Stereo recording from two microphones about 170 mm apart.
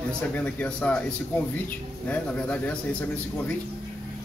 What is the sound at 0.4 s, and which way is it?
Speech, 5° left (ahead or behind).